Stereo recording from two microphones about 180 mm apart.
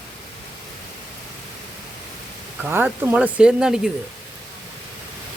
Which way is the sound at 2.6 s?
10° right (ahead or behind).